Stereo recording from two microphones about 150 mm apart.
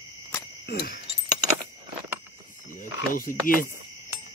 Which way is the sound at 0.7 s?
90° left.